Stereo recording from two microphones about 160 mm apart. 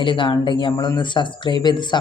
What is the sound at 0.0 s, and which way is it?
Speech, 30° left (ahead or behind).